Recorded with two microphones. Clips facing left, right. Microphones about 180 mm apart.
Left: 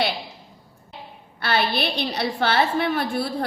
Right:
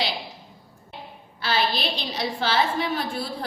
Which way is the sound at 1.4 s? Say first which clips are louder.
Left 2 dB; 60° left (ahead or behind).